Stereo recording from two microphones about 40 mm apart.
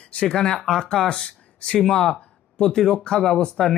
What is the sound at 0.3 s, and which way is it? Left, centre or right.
Speech, left.